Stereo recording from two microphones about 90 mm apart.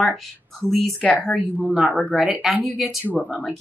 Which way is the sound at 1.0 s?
15° left (ahead or behind).